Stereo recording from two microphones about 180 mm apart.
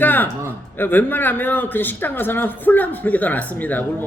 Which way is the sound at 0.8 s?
10° left (ahead or behind).